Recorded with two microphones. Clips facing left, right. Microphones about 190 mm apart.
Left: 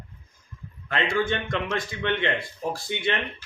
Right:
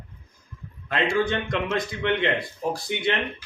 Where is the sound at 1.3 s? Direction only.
20° right (ahead or behind).